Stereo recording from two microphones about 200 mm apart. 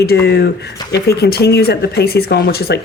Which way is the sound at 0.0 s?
55° left (ahead or behind).